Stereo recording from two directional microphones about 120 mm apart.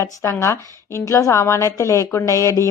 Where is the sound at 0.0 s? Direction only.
25° left (ahead or behind).